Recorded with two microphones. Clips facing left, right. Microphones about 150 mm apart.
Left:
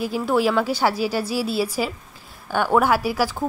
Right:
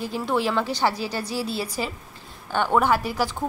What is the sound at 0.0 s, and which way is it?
A woman's voice, 10° left (ahead or behind).